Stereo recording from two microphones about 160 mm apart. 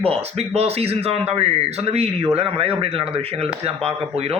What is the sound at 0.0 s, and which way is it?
A man's voice, 40° right (ahead or behind).